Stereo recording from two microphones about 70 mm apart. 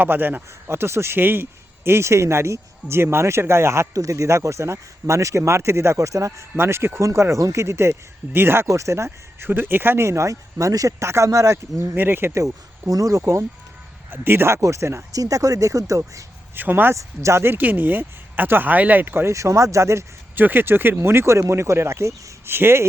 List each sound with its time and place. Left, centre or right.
0.0 s a man's voice: right
3.9 s speech: right
6.6 s a man's voice: right
8.6 s speech: right
9.0 s speech: right
11.9 s a man's voice: right
12.9 s speech: right
14.1 s a man's voice: right
15.2 s speech: right
16.6 s speech: right
16.9 s a man's voice: right
19.3 s speech: right
20.3 s a man's voice: right